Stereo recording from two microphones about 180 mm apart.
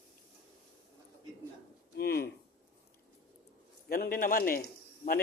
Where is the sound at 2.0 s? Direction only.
60° left (ahead or behind).